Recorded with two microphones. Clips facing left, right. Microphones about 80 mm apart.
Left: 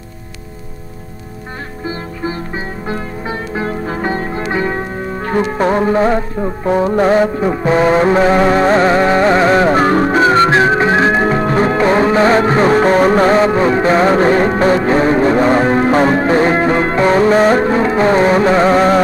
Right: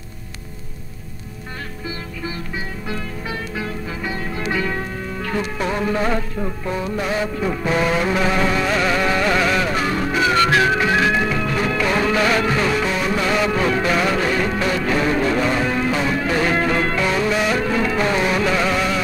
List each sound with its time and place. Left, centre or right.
1.9 s music: left
6.7 s music: left